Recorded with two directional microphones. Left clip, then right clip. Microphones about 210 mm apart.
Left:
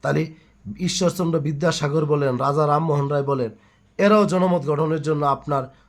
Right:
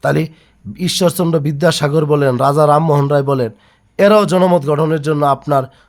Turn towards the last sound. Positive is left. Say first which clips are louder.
# right 9 dB
turn(degrees=-40)  # may be behind; listen again after turning